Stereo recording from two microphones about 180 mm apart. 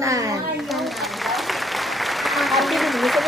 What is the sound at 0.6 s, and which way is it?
Applause, centre (ahead or behind).